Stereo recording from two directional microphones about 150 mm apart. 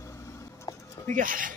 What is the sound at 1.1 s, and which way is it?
Speech, 65° right (ahead or behind).